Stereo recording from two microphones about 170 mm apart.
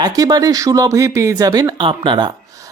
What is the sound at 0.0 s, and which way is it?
Speech, 20° right (ahead or behind).